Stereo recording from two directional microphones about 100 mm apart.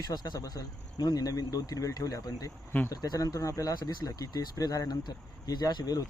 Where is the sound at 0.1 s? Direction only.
40° left (ahead or behind).